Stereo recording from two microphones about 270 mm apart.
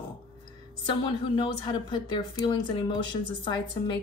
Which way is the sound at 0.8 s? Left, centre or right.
Centre.